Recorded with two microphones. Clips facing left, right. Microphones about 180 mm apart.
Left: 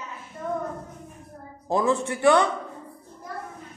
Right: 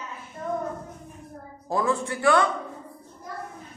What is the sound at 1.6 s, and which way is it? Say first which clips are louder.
Speech: left 2 dB; 20° left (ahead or behind).